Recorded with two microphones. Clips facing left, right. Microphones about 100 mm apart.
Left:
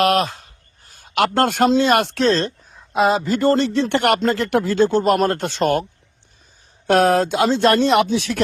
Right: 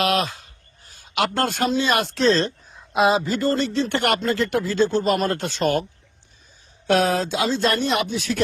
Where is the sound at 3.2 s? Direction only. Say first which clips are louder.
Left 5 dB; 50° left (ahead or behind); by 8.4 s 65° left (ahead or behind).